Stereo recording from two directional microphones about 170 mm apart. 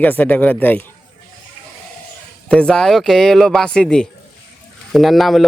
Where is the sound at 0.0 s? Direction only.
10° left (ahead or behind).